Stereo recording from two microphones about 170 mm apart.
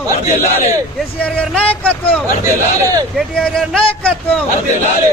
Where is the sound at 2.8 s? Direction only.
20° right (ahead or behind).